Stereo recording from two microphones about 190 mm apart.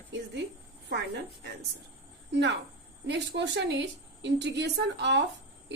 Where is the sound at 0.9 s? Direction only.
60° right (ahead or behind).